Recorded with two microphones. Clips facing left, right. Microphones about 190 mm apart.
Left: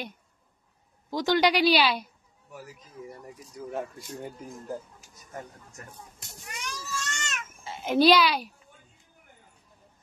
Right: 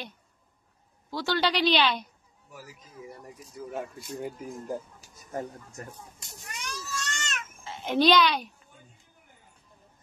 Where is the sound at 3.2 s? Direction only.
Centre (ahead or behind).